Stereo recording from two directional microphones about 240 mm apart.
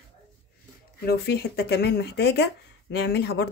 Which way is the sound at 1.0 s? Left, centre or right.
Left.